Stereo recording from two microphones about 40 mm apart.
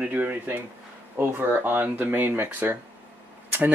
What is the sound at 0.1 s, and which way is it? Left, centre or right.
Speech, right.